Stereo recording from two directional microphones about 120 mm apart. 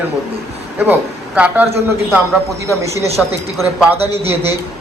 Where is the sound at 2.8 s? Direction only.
25° right (ahead or behind).